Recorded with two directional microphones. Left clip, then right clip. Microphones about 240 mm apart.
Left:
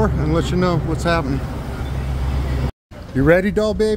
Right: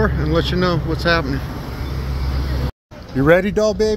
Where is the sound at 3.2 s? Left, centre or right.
Centre.